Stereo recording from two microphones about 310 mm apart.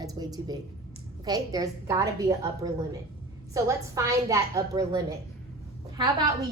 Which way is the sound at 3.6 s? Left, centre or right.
Centre.